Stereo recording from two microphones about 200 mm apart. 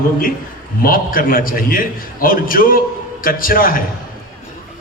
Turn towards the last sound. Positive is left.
turn(degrees=45)  # may be behind; listen again after turning